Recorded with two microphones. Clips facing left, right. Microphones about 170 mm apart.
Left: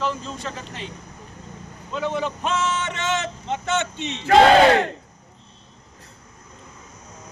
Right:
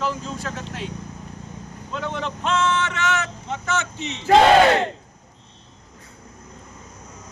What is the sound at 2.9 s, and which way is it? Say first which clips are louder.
Speech: right 1 dB; 25° left (ahead or behind).